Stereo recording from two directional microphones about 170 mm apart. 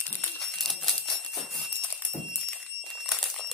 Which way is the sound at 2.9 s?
Centre (ahead or behind).